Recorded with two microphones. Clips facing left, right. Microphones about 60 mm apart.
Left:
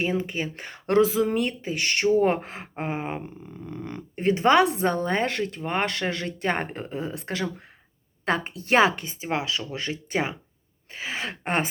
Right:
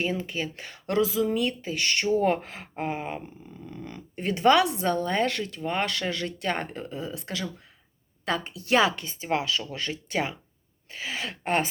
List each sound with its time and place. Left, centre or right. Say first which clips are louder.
0.0 s speech: left 3 dB; left